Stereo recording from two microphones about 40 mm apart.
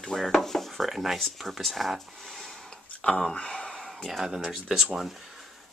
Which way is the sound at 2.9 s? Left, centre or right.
Left.